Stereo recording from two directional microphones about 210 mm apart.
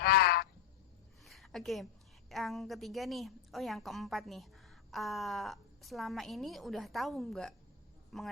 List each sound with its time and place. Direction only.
0.0 s frog: 45° left (ahead or behind)
1.2 s a sound: centre (ahead or behind)
2.3 s a woman's voice: centre (ahead or behind)